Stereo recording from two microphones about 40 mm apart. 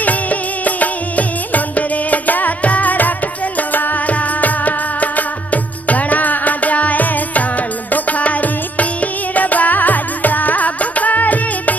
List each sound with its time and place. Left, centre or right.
0.0 s music: left